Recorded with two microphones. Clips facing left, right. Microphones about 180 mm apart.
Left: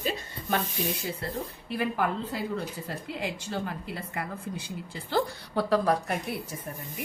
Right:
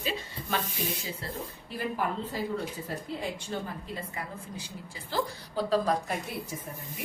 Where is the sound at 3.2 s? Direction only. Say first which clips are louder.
Left 2 dB; 70° left (ahead or behind).